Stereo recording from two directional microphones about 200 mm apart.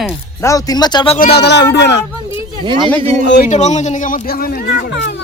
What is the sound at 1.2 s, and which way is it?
Speech, 55° left (ahead or behind).